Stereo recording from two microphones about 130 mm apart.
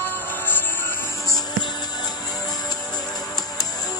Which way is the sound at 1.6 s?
35° left (ahead or behind).